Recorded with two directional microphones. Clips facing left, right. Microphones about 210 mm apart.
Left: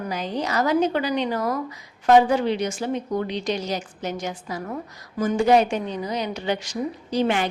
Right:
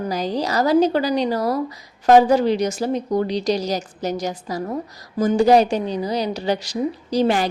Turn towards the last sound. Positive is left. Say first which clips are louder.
# right 3 dB
turn(degrees=-35)  # may be behind; listen again after turning